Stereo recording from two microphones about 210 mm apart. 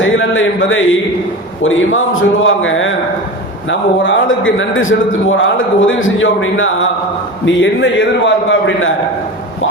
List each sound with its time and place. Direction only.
0.0 s a man's voice: 65° left (ahead or behind)